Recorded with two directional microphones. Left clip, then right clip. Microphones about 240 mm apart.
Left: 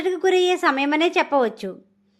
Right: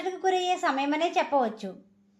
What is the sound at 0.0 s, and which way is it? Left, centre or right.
A woman's voice, left.